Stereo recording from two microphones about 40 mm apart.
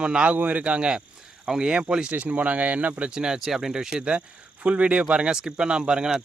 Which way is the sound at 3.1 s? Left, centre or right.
Centre.